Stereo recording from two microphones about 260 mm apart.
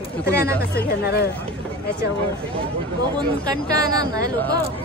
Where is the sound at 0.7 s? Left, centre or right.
Left.